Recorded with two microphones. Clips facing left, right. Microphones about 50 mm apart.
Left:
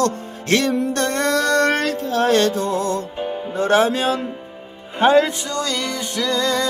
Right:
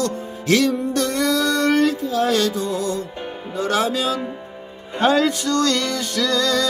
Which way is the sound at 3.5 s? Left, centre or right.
Left.